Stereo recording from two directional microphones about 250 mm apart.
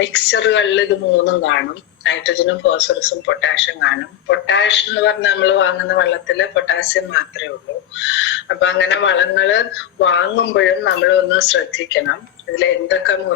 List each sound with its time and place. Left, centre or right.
0.0 s a man's voice: left